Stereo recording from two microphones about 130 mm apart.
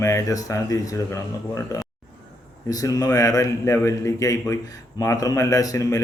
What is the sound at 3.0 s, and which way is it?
A man's voice, 25° left (ahead or behind).